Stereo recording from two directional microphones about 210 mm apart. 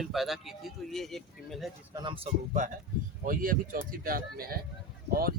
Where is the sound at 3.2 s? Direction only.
40° right (ahead or behind).